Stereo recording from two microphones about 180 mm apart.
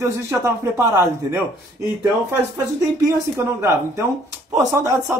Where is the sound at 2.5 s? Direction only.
15° right (ahead or behind).